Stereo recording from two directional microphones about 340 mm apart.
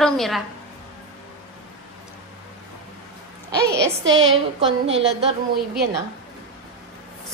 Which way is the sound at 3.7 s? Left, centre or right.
Right.